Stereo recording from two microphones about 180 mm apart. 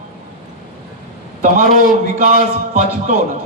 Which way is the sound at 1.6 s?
50° left (ahead or behind).